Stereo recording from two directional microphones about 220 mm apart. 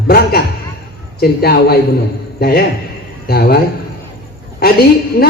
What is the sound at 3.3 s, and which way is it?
Speech, 45° left (ahead or behind).